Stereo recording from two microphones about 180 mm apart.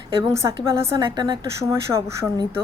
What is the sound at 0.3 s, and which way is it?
A woman's voice, 15° right (ahead or behind).